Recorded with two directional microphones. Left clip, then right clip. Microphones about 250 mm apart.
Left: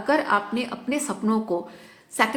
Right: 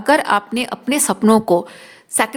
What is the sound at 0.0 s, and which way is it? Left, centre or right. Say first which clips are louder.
A woman's voice: right 7 dB; right.